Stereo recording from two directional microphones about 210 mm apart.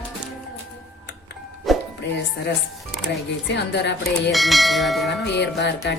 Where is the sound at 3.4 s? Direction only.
55° left (ahead or behind).